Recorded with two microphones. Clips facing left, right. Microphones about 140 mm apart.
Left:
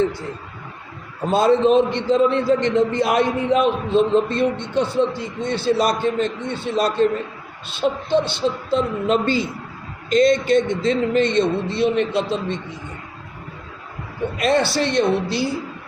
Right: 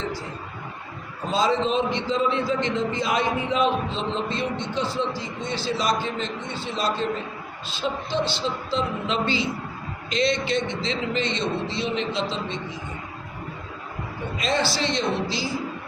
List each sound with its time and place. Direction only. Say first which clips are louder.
0.0 s speech: left 9 dB; 55° left (ahead or behind)
1.3 s a man's voice: left 7 dB; 55° left (ahead or behind)
14.3 s a man's voice: left 6 dB; 60° left (ahead or behind)